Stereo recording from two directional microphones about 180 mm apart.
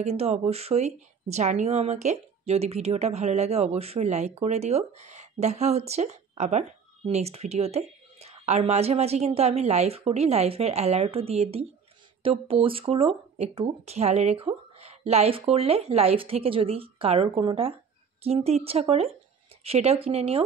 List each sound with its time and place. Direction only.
0.0 s speech: 35° right (ahead or behind)